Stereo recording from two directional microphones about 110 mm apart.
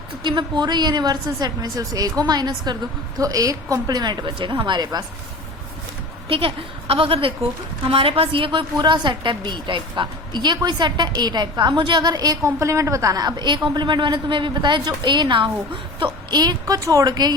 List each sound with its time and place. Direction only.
0.2 s a woman's voice: 45° right (ahead or behind)
6.2 s a woman's voice: 60° right (ahead or behind); by 17.3 s 35° right (ahead or behind)